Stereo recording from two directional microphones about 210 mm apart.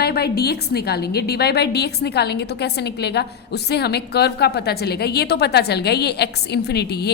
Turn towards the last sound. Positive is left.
turn(degrees=50)  # may be behind; listen again after turning